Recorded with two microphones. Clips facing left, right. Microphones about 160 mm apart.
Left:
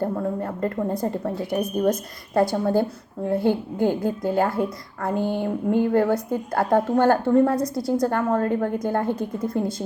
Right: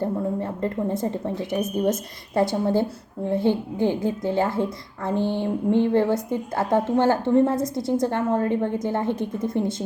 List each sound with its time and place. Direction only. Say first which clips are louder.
0.0 s a woman's voice: even; 25° right (ahead or behind)